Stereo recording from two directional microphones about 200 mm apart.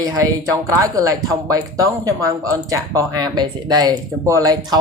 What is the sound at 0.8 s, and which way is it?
Speech, 15° right (ahead or behind).